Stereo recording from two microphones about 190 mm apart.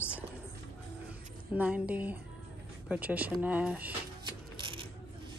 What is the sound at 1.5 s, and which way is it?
Speech, 5° right (ahead or behind).